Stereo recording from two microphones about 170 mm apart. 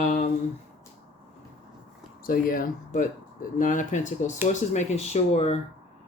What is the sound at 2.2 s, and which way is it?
Speech, 55° left (ahead or behind).